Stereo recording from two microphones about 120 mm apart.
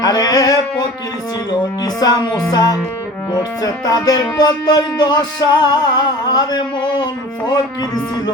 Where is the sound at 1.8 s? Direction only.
35° left (ahead or behind).